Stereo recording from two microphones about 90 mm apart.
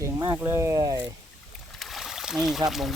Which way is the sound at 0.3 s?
30° right (ahead or behind).